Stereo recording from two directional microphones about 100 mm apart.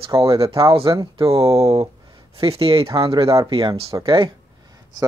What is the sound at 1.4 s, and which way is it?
Speech, 30° right (ahead or behind).